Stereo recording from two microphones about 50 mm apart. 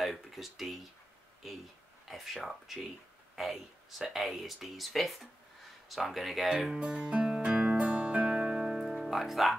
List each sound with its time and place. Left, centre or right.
0.0 s speech: centre
7.5 s music: centre
8.3 s music: centre